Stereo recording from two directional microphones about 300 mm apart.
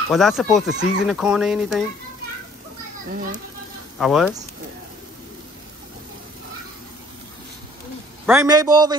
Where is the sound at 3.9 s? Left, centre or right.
Centre.